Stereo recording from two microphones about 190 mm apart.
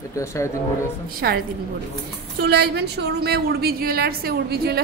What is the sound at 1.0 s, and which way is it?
Speech, 55° right (ahead or behind).